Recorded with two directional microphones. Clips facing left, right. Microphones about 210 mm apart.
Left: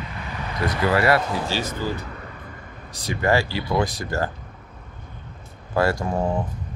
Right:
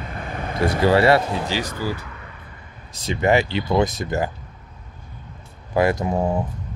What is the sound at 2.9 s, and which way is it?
Speech, 25° right (ahead or behind).